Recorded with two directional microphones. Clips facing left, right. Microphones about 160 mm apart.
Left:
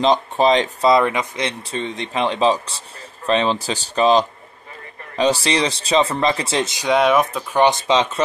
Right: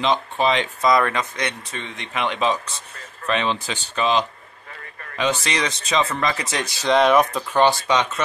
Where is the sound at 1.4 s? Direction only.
30° left (ahead or behind).